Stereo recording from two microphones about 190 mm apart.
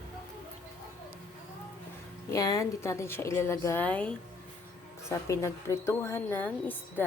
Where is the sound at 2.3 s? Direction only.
20° left (ahead or behind).